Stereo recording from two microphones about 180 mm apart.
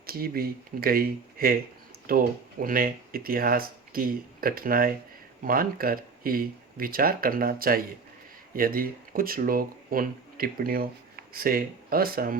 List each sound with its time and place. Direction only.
0.0 s speech: 55° right (ahead or behind)